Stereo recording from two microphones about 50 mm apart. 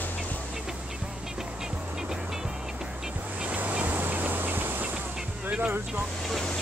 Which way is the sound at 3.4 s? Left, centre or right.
Right.